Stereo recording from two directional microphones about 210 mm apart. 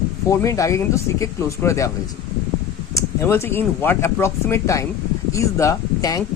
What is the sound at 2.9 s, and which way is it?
A man's voice, 10° left (ahead or behind).